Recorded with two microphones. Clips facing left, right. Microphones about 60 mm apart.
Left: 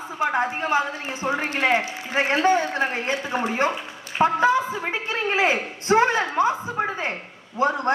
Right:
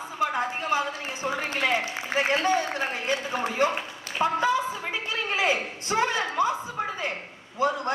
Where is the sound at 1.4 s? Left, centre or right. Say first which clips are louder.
Left 4 dB; left.